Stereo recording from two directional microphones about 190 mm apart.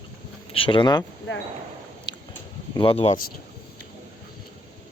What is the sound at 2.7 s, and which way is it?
Speech, 30° left (ahead or behind).